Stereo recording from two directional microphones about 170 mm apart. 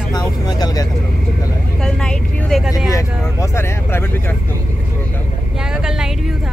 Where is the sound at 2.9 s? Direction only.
15° left (ahead or behind).